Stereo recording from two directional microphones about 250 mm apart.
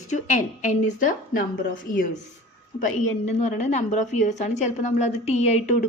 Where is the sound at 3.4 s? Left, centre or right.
Left.